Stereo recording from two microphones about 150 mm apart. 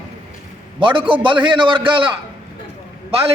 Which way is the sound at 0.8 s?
35° right (ahead or behind).